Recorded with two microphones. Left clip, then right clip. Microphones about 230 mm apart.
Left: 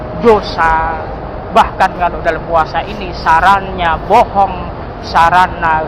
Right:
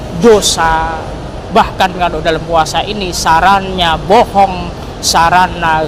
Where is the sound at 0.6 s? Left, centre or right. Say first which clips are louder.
Even; right.